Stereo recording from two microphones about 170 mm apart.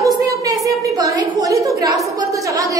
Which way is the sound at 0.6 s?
25° right (ahead or behind).